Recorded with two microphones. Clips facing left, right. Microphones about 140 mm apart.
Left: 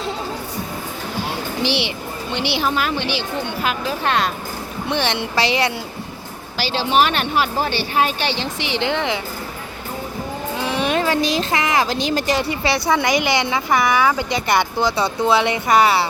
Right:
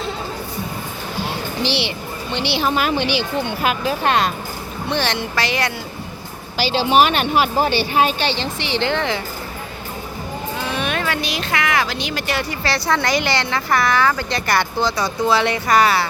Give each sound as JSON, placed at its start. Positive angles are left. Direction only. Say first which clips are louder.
{"t": 1.6, "sound": "speech", "louder": "left 1 dB", "side_deg": 15}
{"t": 2.6, "sound": "speech", "louder": "right 2 dB", "side_deg": -5}
{"t": 4.9, "sound": "speech", "louder": "even", "side_deg": 20}
{"t": 6.6, "sound": "speech", "louder": "right 2 dB", "side_deg": 0}
{"t": 8.2, "sound": "speech", "louder": "right 1 dB", "side_deg": 10}
{"t": 10.7, "sound": "a sound", "louder": "left 4 dB", "side_deg": 25}
{"t": 12.4, "sound": "speech", "louder": "left 2 dB", "side_deg": 25}